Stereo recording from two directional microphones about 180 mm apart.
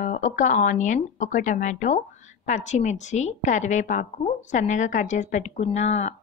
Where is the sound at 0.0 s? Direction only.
45° left (ahead or behind).